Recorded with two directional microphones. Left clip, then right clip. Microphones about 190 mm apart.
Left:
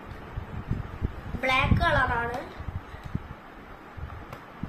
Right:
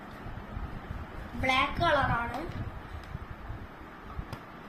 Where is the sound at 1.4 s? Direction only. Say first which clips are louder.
Left 2 dB; 30° left (ahead or behind).